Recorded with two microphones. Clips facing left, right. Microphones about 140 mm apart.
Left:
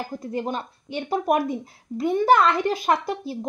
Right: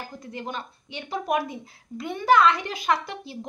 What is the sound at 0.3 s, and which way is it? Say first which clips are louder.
Speech: left 6 dB; 40° left (ahead or behind).